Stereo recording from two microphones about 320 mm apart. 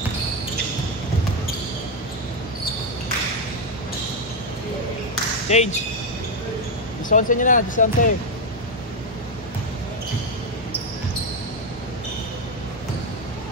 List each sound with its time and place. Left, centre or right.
5.5 s speech: left
7.1 s speech: left